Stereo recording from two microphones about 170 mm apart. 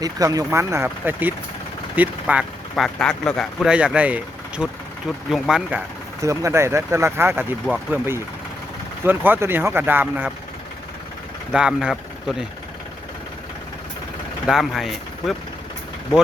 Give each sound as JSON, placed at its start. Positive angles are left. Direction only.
{"t": 0.0, "sound": "speech", "side_deg": -20}
{"t": 6.2, "sound": "speech", "side_deg": -15}
{"t": 11.5, "sound": "speech", "side_deg": -5}
{"t": 14.4, "sound": "speech", "side_deg": 0}